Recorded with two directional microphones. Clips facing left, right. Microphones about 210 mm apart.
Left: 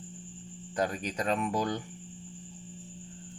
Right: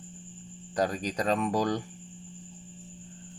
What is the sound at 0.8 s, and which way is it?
Speech, 35° right (ahead or behind).